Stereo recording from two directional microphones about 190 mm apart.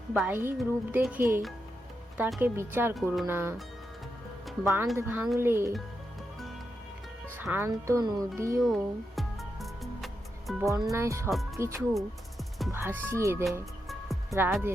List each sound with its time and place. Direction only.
0.1 s speech: 10° right (ahead or behind)
2.9 s speech: centre (ahead or behind)
3.2 s speech: 10° right (ahead or behind)
4.6 s speech: 10° right (ahead or behind)
7.3 s speech: 10° right (ahead or behind)
8.6 s music: centre (ahead or behind)
10.9 s speech: 15° right (ahead or behind)
11.9 s music: centre (ahead or behind)
12.7 s speech: 10° right (ahead or behind)
13.8 s music: centre (ahead or behind)
14.3 s speech: 10° right (ahead or behind)